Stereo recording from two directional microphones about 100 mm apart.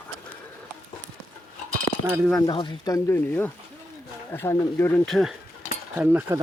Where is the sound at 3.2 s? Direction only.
20° left (ahead or behind).